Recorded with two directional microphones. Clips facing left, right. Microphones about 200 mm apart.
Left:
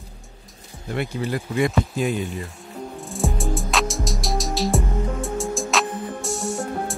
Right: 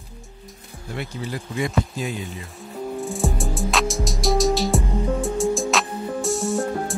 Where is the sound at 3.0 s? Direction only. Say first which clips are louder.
Even; centre (ahead or behind).